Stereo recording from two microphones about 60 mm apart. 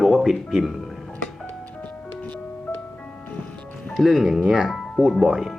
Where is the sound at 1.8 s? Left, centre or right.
Left.